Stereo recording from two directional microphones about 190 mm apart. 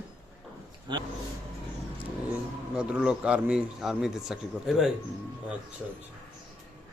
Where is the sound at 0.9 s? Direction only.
25° right (ahead or behind).